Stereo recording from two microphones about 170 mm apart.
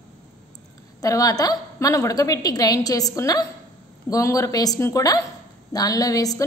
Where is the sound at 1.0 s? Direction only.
20° left (ahead or behind).